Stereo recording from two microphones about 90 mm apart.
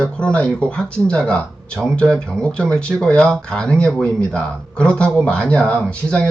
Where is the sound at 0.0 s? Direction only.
15° left (ahead or behind).